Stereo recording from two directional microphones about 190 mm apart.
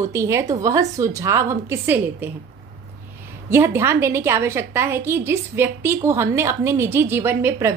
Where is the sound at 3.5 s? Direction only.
15° right (ahead or behind).